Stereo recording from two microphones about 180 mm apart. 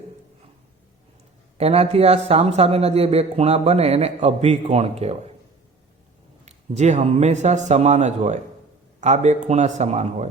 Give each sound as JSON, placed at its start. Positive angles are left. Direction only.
{"t": 1.5, "sound": "a man's voice", "side_deg": -35}
{"t": 6.4, "sound": "a man's voice", "side_deg": -40}